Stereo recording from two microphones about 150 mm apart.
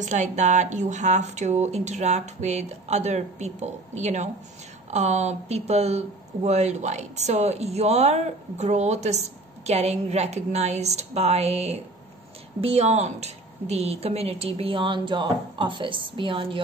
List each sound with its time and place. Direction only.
0.0 s a woman's voice: 55° right (ahead or behind); by 16.6 s 35° right (ahead or behind)